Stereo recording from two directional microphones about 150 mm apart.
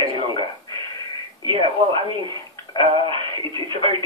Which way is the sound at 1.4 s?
35° right (ahead or behind).